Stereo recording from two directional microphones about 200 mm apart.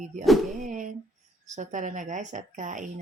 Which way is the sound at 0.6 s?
40° right (ahead or behind).